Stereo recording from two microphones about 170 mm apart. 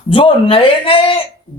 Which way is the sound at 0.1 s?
30° left (ahead or behind).